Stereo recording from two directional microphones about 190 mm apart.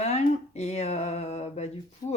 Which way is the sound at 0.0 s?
35° left (ahead or behind).